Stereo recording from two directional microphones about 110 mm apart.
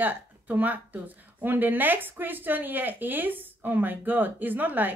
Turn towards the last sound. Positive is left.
turn(degrees=-15)  # may be behind; listen again after turning